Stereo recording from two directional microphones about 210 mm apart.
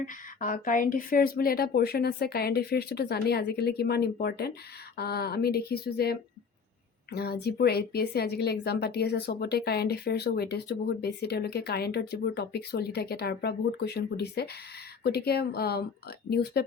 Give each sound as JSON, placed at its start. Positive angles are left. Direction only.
{"t": 0.0, "sound": "a woman's voice", "side_deg": 40}